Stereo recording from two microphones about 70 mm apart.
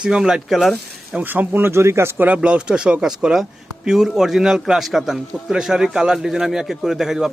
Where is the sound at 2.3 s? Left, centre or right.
Centre.